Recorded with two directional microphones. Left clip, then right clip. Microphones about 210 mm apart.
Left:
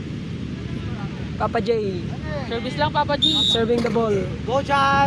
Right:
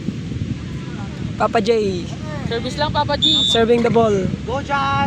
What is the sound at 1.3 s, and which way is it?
Speech, 30° right (ahead or behind).